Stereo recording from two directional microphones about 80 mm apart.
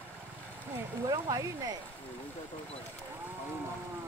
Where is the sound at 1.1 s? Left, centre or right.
Right.